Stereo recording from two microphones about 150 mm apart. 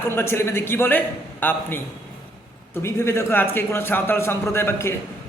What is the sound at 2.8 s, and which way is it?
A man's voice, 20° left (ahead or behind).